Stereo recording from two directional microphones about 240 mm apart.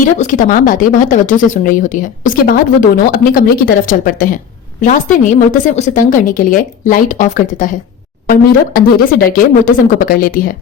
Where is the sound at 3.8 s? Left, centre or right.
Left.